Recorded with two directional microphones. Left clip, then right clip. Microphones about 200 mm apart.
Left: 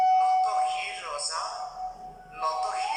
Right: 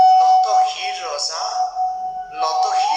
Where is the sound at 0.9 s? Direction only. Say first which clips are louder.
Right 10 dB; 30° right (ahead or behind).